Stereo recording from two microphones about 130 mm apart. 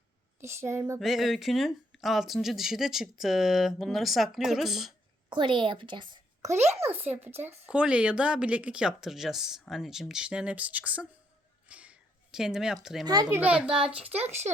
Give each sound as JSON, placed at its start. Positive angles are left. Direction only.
{"t": 0.3, "sound": "a woman's voice", "side_deg": -20}
{"t": 0.9, "sound": "speech", "side_deg": 0}
{"t": 5.3, "sound": "a woman's voice", "side_deg": -40}
{"t": 6.4, "sound": "a child's voice", "side_deg": -20}
{"t": 11.7, "sound": "a sound", "side_deg": -10}
{"t": 13.3, "sound": "a woman's voice", "side_deg": -10}